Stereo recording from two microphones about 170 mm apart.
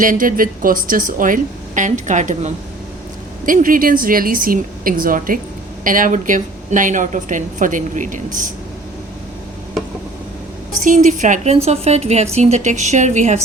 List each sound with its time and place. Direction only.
0.0 s a woman's voice: 55° right (ahead or behind)
10.8 s a woman's voice: 45° right (ahead or behind)